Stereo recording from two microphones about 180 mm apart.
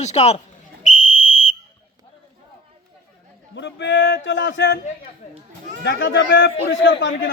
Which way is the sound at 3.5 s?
80° left.